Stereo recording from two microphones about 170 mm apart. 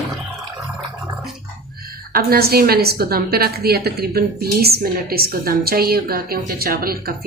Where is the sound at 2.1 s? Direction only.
65° right (ahead or behind).